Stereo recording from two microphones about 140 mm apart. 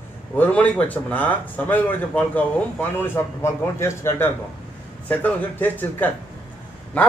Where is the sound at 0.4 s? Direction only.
10° left (ahead or behind).